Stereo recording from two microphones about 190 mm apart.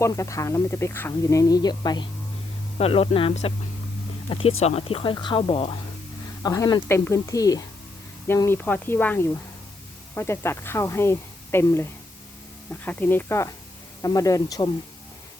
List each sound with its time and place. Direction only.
0.0 s speech: 15° left (ahead or behind)
2.7 s speech: 30° left (ahead or behind)
6.4 s speech: 20° left (ahead or behind)